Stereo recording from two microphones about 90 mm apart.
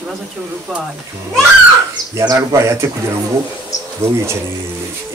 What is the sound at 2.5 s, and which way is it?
Speech, 30° right (ahead or behind).